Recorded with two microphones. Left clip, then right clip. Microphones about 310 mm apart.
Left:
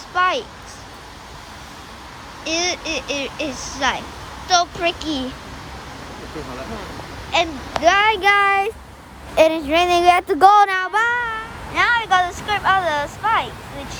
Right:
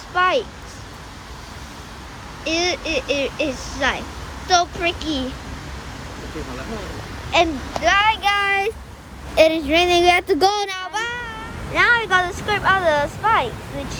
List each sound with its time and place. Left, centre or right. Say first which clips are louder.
0.1 s a sound: right 1 dB; centre
2.4 s speech: right 1 dB; centre
7.3 s speech: right 2 dB; centre
7.9 s a child's voice: left 2 dB; left
8.4 s speech: left 2 dB; centre
11.7 s speech: even; centre